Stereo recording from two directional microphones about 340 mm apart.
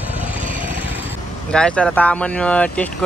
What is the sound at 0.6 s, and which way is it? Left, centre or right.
Speech, centre.